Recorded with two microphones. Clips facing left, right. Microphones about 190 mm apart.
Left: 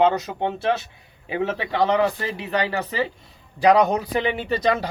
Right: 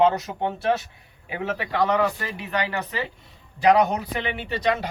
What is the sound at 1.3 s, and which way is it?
Speech, 30° left (ahead or behind).